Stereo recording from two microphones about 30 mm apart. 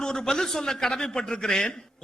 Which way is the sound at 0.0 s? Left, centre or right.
Left.